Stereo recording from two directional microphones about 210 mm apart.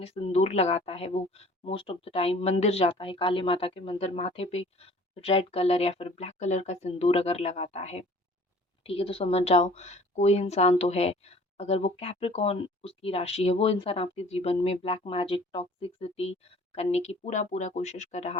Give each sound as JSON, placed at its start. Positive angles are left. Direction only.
{"t": 0.0, "sound": "speech", "side_deg": 30}